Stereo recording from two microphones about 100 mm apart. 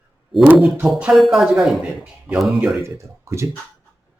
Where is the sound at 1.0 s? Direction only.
Centre (ahead or behind).